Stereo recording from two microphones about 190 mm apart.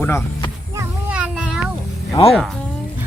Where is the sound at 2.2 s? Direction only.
25° left (ahead or behind).